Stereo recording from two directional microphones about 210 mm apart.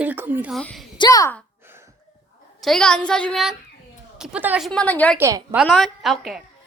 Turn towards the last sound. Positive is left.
turn(degrees=0)  # may be behind; listen again after turning